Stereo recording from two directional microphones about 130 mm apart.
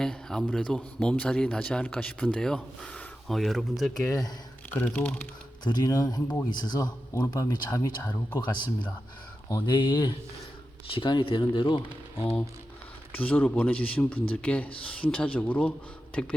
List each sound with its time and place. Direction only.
0.0 s a man's voice: 5° left (ahead or behind)
4.7 s a man's voice: 15° left (ahead or behind)
5.6 s speech: 30° left (ahead or behind)
8.4 s speech: 35° left (ahead or behind)
13.1 s a man's voice: 10° left (ahead or behind)